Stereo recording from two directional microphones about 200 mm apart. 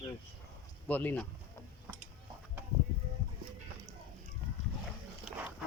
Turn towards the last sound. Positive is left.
turn(degrees=-5)  # may be behind; listen again after turning